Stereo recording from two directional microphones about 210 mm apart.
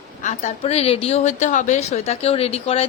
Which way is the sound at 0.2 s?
35° left (ahead or behind).